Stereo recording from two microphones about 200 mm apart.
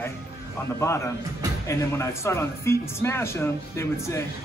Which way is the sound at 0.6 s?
15° left (ahead or behind).